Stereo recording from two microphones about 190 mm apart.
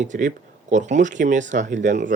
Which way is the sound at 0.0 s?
40° right (ahead or behind).